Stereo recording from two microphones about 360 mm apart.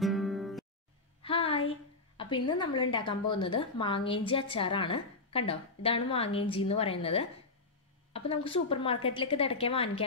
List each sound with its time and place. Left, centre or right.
0.0 s music: centre
1.2 s a sound: centre
2.1 s a woman's voice: centre